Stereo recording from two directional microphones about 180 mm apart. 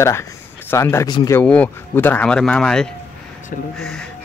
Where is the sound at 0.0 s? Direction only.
15° left (ahead or behind).